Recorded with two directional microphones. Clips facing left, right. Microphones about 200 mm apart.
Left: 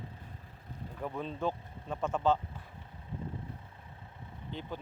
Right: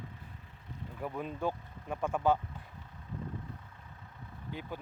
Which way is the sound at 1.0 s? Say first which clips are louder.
Even; 10° right (ahead or behind).